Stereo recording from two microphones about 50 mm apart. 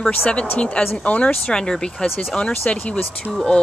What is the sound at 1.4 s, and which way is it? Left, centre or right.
Speech, centre.